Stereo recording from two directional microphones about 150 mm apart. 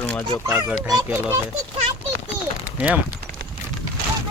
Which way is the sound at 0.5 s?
5° right (ahead or behind).